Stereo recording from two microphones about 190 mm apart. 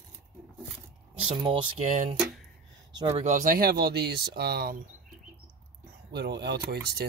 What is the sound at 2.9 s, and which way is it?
Speech, 20° right (ahead or behind).